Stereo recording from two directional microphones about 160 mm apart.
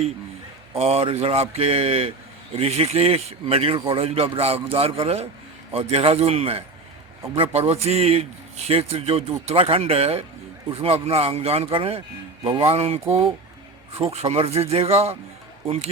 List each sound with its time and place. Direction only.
0.8 s a man's voice: 40° right (ahead or behind)